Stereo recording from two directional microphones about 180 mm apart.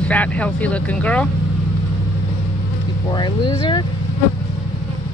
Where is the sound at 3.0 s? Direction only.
25° left (ahead or behind).